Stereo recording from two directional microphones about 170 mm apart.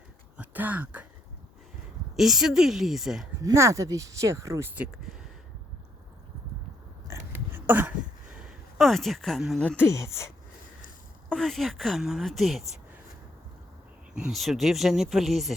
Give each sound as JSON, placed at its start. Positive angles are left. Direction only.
{"t": 0.3, "sound": "speech", "side_deg": -10}
{"t": 2.1, "sound": "speech", "side_deg": 0}
{"t": 3.4, "sound": "speech", "side_deg": -15}
{"t": 7.1, "sound": "a sound", "side_deg": -10}
{"t": 8.4, "sound": "speech", "side_deg": 0}
{"t": 11.3, "sound": "speech", "side_deg": 0}
{"t": 14.1, "sound": "speech", "side_deg": -5}